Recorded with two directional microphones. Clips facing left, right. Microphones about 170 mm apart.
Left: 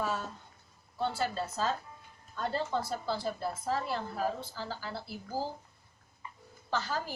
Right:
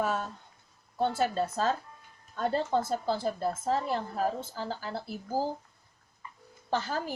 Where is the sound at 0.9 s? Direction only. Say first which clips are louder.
Right 5 dB; 50° right (ahead or behind).